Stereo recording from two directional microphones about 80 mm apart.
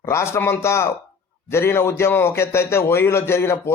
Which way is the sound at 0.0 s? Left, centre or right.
Left.